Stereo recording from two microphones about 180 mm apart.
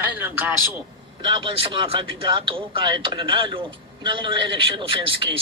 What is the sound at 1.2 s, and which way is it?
Speech, 30° right (ahead or behind).